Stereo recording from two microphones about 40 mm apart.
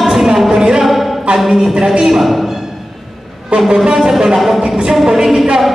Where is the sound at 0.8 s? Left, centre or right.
Centre.